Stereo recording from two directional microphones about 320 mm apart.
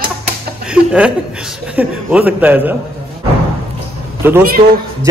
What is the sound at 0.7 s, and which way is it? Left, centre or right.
A man's voice, centre.